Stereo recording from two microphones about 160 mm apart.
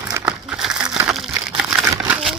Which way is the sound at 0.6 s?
5° right (ahead or behind).